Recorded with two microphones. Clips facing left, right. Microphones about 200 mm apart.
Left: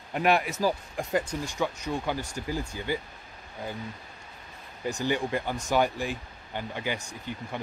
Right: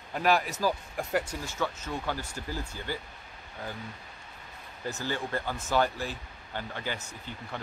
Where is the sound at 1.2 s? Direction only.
15° left (ahead or behind).